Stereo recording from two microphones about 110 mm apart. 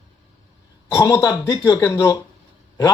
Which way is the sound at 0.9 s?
25° left (ahead or behind).